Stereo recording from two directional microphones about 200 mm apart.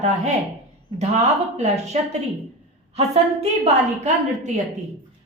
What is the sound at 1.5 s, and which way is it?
A woman's voice, 35° right (ahead or behind).